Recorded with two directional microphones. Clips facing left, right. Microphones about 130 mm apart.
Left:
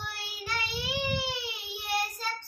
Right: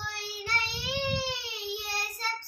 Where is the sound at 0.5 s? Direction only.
10° left (ahead or behind).